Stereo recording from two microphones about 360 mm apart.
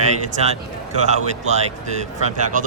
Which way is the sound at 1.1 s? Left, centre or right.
Centre.